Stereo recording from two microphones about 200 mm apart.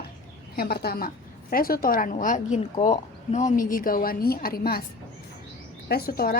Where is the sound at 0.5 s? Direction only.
50° left (ahead or behind).